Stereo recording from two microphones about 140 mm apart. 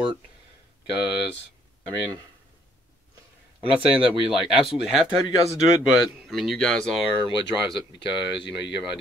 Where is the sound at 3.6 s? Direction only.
40° right (ahead or behind).